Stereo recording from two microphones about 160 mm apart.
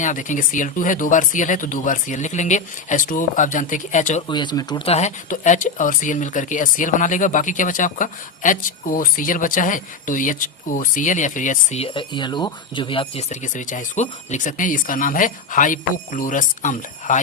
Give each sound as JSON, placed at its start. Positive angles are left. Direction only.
{"t": 0.0, "sound": "speech", "side_deg": 50}
{"t": 4.3, "sound": "speech", "side_deg": 30}
{"t": 4.9, "sound": "speech", "side_deg": 45}
{"t": 11.8, "sound": "speech", "side_deg": 30}
{"t": 13.3, "sound": "speech", "side_deg": 55}